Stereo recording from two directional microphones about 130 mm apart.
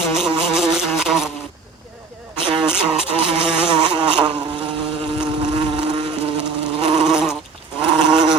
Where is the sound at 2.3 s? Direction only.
40° right (ahead or behind).